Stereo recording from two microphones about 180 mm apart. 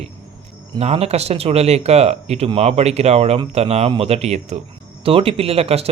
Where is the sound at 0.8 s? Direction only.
35° right (ahead or behind).